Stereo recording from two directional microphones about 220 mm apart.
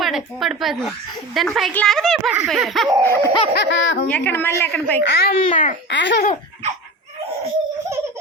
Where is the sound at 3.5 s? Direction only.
55° left (ahead or behind).